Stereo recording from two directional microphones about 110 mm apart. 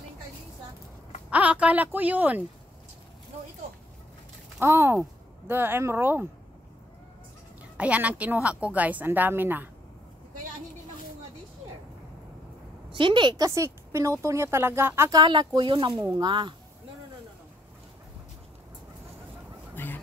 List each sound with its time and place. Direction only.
1.3 s a woman's voice: 10° right (ahead or behind)
4.6 s speech: 25° right (ahead or behind)
7.7 s a woman's voice: 10° right (ahead or behind)
12.9 s speech: 45° right (ahead or behind)
13.6 s a woman's voice: 30° right (ahead or behind)
15.1 s speech: 40° right (ahead or behind)
19.7 s a sound: 20° left (ahead or behind)